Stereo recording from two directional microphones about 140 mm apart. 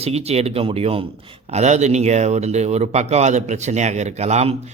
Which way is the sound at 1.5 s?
55° right (ahead or behind).